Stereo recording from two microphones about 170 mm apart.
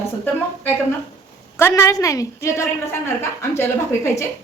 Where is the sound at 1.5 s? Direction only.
15° left (ahead or behind).